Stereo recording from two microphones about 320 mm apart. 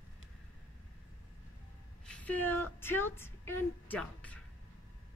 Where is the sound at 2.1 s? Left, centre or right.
Centre.